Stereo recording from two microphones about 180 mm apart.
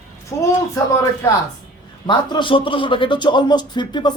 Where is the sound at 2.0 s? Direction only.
25° left (ahead or behind).